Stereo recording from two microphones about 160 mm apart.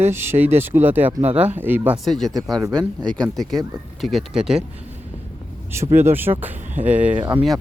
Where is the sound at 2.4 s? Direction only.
25° right (ahead or behind).